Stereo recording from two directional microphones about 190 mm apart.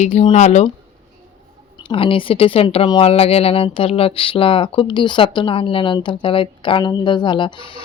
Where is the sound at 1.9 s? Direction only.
30° left (ahead or behind).